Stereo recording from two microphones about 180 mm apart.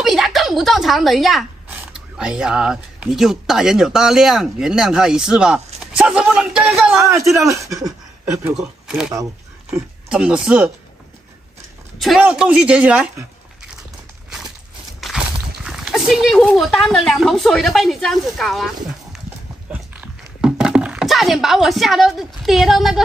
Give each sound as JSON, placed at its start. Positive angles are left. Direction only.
{"t": 0.0, "sound": "speech", "side_deg": 0}
{"t": 7.0, "sound": "a man's voice", "side_deg": -15}
{"t": 8.5, "sound": "speech", "side_deg": -5}
{"t": 9.1, "sound": "speech", "side_deg": -20}
{"t": 10.0, "sound": "a woman's voice", "side_deg": -5}
{"t": 12.0, "sound": "a woman's voice", "side_deg": -5}
{"t": 15.0, "sound": "speech", "side_deg": 0}
{"t": 19.7, "sound": "a sound", "side_deg": -5}